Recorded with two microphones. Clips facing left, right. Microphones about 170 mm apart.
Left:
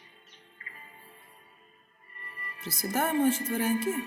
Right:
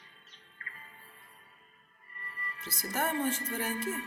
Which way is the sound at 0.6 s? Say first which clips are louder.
Right 1 dB; 20° left (ahead or behind).